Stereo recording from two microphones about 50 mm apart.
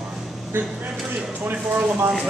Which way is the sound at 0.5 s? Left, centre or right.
Right.